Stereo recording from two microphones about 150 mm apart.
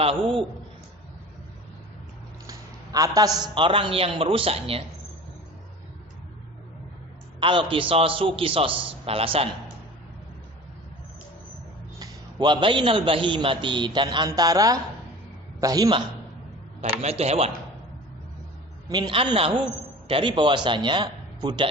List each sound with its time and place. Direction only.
0.0 s a man's voice: 40° right (ahead or behind)
2.5 s a man's voice: 25° right (ahead or behind); by 4.8 s 40° right (ahead or behind)
7.3 s a man's voice: 35° right (ahead or behind)
11.9 s a man's voice: 30° right (ahead or behind)
17.0 s speech: 45° right (ahead or behind)
18.9 s a man's voice: 30° right (ahead or behind)